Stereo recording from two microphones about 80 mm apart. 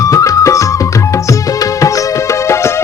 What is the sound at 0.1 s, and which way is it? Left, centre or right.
Music, left.